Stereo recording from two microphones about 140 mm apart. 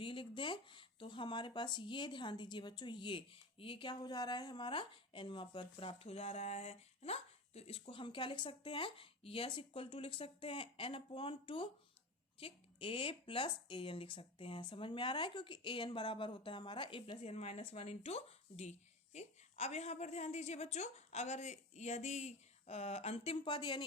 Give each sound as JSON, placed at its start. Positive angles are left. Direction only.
{"t": 0.0, "sound": "speech", "side_deg": 35}
{"t": 17.2, "sound": "speech", "side_deg": 50}